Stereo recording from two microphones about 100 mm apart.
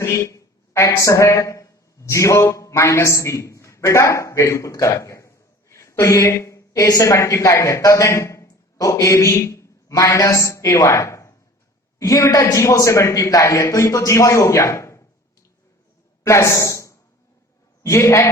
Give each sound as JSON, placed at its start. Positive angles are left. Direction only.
{"t": 0.0, "sound": "a woman's voice", "side_deg": 30}
{"t": 16.2, "sound": "a woman's voice", "side_deg": 30}